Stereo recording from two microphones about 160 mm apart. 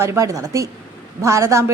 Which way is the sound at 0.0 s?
15° right (ahead or behind).